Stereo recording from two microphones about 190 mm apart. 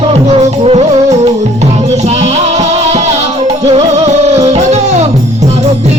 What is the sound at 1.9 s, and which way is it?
Music, 35° right (ahead or behind).